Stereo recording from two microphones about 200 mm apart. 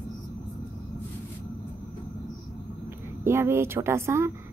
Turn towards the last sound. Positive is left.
turn(degrees=-15)  # may be behind; listen again after turning